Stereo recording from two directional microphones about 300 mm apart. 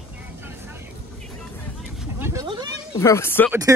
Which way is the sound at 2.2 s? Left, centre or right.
Centre.